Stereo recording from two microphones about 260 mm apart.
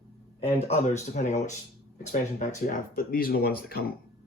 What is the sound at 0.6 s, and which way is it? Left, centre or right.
Speech, left.